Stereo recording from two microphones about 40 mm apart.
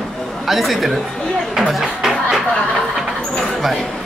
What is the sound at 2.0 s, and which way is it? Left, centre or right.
Music, centre.